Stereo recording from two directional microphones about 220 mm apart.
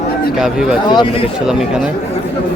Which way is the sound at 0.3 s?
5° right (ahead or behind).